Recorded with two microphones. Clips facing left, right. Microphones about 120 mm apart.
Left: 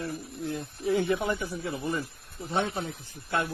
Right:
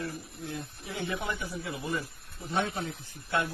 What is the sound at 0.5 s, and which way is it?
Speech, 40° left (ahead or behind).